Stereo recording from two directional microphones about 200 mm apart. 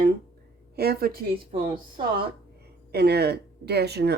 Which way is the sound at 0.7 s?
50° right (ahead or behind).